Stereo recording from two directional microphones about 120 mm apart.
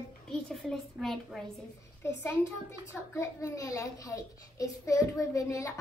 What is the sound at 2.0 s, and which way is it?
A child's voice, 20° left (ahead or behind).